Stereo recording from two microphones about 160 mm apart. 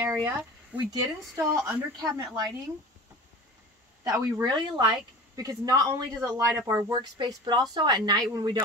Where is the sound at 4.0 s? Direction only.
20° right (ahead or behind).